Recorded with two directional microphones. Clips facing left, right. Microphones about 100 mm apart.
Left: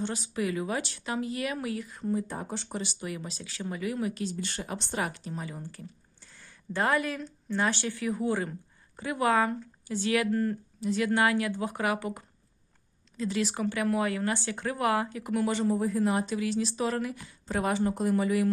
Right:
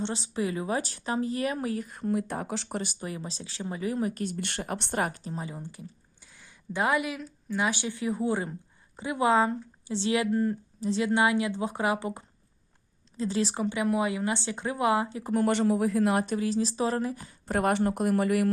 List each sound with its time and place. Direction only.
0.0 s speech: 25° right (ahead or behind)
2.0 s a man's voice: 70° right (ahead or behind); by 2.6 s 85° right
2.6 s speech: 50° right (ahead or behind)
3.0 s speech: 30° right (ahead or behind)
4.1 s speech: 55° right (ahead or behind)
5.0 s speech: 35° right (ahead or behind)
6.3 s a woman's voice: 15° right (ahead or behind)
10.8 s a woman's voice: 30° right (ahead or behind)
15.4 s a man's voice: 70° right (ahead or behind)
16.3 s speech: 35° right (ahead or behind)
17.5 s speech: 60° right (ahead or behind)